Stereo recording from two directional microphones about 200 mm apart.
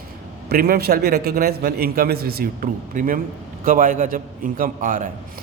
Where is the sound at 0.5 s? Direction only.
50° right (ahead or behind).